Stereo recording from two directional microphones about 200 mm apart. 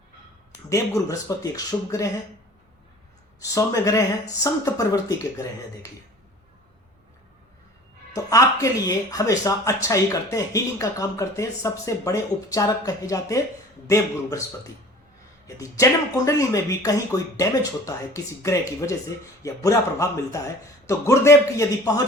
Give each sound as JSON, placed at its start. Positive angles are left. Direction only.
{"t": 0.7, "sound": "speech", "side_deg": 15}
{"t": 3.4, "sound": "speech", "side_deg": 15}
{"t": 8.1, "sound": "speech", "side_deg": 15}
{"t": 15.4, "sound": "speech", "side_deg": 15}